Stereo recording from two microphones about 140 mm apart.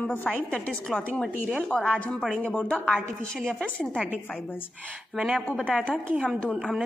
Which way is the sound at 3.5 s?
5° left (ahead or behind).